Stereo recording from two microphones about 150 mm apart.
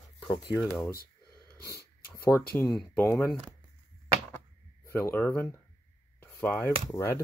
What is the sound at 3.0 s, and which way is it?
Speech, 15° left (ahead or behind).